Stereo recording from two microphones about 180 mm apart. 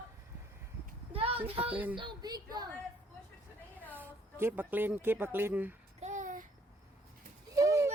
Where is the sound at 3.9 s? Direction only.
10° right (ahead or behind).